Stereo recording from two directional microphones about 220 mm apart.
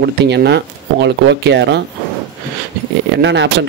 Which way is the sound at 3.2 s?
55° right (ahead or behind).